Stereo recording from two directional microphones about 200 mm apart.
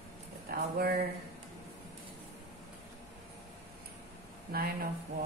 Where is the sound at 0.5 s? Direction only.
50° right (ahead or behind).